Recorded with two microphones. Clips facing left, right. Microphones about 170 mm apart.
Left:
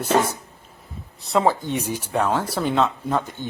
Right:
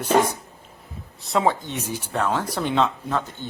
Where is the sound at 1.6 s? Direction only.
10° left (ahead or behind).